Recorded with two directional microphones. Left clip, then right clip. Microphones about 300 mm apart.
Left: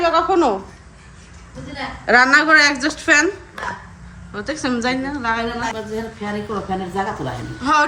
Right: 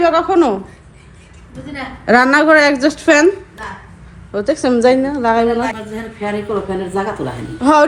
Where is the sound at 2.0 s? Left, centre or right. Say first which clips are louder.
Right 2 dB; centre.